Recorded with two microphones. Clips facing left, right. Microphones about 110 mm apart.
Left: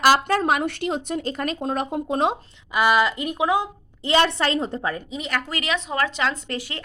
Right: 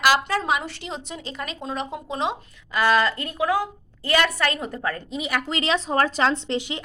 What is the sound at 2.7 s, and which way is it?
A woman's voice, 15° left (ahead or behind).